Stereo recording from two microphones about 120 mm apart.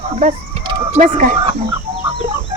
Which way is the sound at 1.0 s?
90° right.